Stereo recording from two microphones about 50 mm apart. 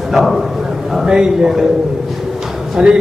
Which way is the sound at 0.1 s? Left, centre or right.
Centre.